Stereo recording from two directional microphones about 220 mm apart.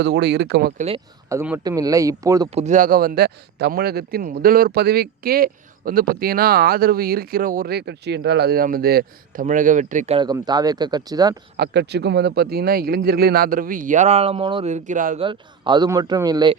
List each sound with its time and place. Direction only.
0.0 s a man's voice: 50° right (ahead or behind)
0.8 s a man's voice: 25° right (ahead or behind)
1.3 s speech: 10° right (ahead or behind)
2.6 s a man's voice: 35° right (ahead or behind)
10.2 s speech: 20° right (ahead or behind)
11.5 s a man's voice: 50° right (ahead or behind)
15.2 s a man's voice: 20° right (ahead or behind)